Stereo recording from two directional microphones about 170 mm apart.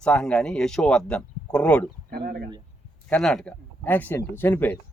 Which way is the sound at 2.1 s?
60° right (ahead or behind).